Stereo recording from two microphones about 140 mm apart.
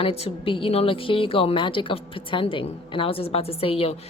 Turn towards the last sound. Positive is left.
turn(degrees=45)  # may be behind; listen again after turning